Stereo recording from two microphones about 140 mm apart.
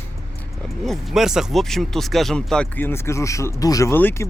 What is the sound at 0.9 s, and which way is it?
Speech, 5° right (ahead or behind).